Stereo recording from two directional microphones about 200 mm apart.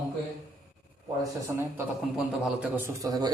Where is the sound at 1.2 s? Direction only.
15° right (ahead or behind).